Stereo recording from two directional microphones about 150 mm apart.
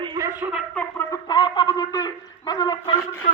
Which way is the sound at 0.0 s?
30° right (ahead or behind).